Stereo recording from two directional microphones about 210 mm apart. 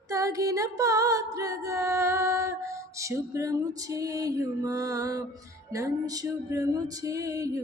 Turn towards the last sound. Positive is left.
turn(degrees=-15)  # may be behind; listen again after turning